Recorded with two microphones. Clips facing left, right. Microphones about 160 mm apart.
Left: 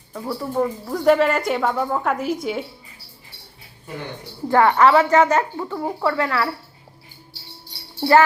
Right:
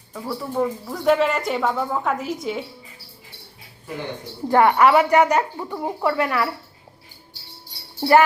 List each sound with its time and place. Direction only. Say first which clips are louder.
0.1 s speech: left 2 dB; 5° left (ahead or behind)
4.4 s speech: even; 20° right (ahead or behind)